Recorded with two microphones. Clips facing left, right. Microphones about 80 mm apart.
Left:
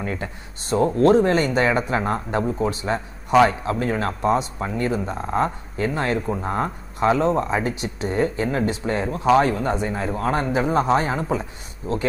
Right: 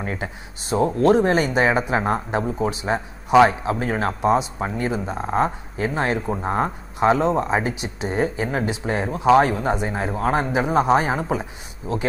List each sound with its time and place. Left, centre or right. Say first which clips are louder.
0.0 s speech: even; centre
6.4 s speech: right 2 dB; right
7.2 s speech: even; centre